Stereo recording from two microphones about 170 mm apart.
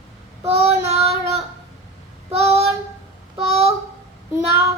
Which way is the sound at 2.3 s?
35° right (ahead or behind).